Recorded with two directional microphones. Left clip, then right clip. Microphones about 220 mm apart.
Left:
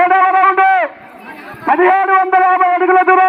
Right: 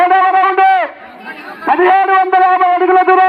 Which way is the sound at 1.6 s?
30° left (ahead or behind).